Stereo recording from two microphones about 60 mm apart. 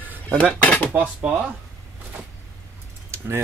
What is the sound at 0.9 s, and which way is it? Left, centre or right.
Speech, right.